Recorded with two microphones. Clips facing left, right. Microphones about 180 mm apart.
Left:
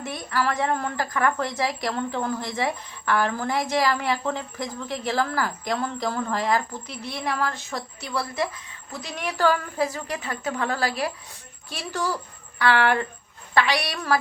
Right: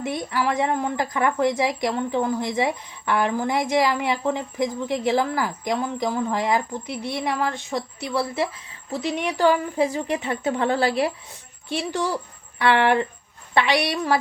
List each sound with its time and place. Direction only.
0.1 s a woman's voice: 15° right (ahead or behind)
9.4 s a woman's voice: 15° right (ahead or behind)